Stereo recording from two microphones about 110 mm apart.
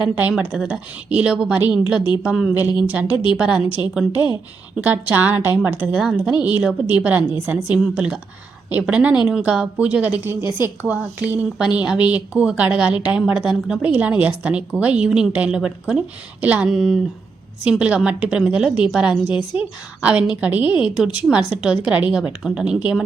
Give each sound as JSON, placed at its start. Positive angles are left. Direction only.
{"t": 0.2, "sound": "a woman's voice", "side_deg": -10}
{"t": 4.8, "sound": "a woman's voice", "side_deg": -15}